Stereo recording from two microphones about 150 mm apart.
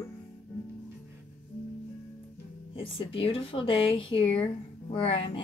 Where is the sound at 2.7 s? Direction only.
35° left (ahead or behind).